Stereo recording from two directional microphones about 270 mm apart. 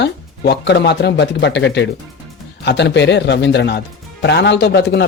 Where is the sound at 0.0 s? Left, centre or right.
Left.